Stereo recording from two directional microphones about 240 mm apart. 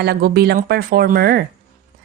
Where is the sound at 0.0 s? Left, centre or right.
Right.